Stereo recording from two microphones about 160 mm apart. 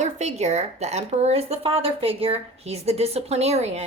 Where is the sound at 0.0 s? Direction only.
45° right (ahead or behind).